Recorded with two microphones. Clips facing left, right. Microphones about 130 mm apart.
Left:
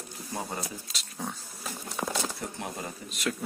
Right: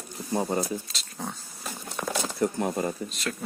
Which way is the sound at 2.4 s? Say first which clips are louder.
Right 10 dB; 45° right (ahead or behind).